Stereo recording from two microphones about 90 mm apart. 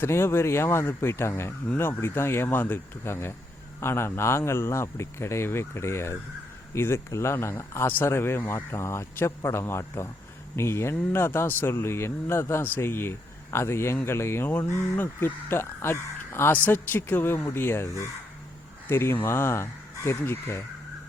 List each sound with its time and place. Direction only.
0.0 s speech: 25° left (ahead or behind)